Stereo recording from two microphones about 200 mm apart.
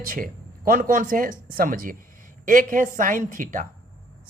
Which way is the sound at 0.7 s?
45° right (ahead or behind).